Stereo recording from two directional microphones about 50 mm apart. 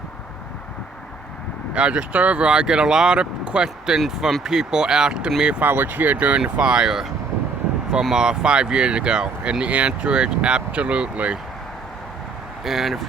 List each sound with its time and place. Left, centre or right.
1.7 s speech: right
5.6 s speech: right
6.4 s speech: centre
8.1 s speech: centre
12.6 s speech: centre